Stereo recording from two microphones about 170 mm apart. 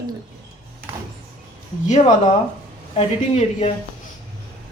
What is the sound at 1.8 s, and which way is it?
Speech, 45° left (ahead or behind).